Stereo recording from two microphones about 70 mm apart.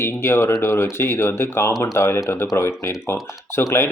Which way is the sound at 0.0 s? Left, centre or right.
Left.